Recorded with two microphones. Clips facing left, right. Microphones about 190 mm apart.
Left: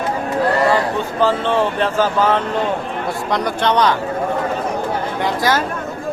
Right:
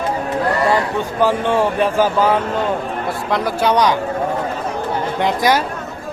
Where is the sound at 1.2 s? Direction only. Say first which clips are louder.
Right 1 dB; 10° right (ahead or behind).